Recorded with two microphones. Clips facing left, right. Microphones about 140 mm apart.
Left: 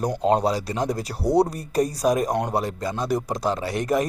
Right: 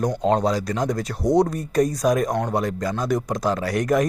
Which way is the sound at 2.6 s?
30° left (ahead or behind).